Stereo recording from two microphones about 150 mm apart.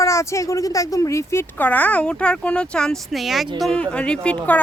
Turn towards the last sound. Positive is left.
turn(degrees=5)  # may be behind; listen again after turning